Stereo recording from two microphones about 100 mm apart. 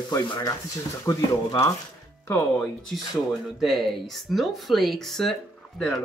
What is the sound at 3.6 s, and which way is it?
Speech, centre (ahead or behind).